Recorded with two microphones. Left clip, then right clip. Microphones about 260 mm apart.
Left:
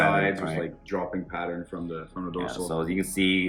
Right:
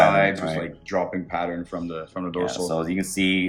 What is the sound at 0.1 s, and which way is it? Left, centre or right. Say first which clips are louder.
Music: right 5 dB; right.